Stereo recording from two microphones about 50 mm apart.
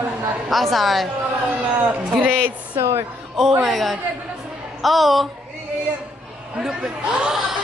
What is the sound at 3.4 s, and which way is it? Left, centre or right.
Speech, centre.